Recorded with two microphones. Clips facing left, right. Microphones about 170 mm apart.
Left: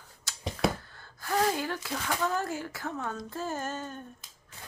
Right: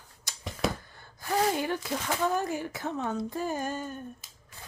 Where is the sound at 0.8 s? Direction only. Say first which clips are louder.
Right 1 dB; 15° right (ahead or behind).